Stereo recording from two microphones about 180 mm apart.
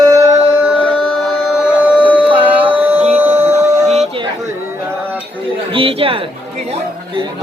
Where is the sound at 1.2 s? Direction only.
5° right (ahead or behind).